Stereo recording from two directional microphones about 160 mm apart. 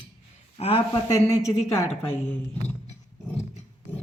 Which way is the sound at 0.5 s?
35° left (ahead or behind).